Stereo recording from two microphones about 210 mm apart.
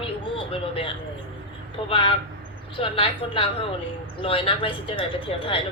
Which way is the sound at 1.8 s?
25° left (ahead or behind).